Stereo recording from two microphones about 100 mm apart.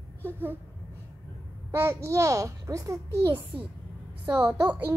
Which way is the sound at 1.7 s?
25° right (ahead or behind).